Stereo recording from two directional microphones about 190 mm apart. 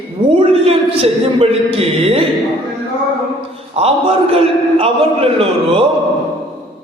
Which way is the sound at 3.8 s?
30° right (ahead or behind).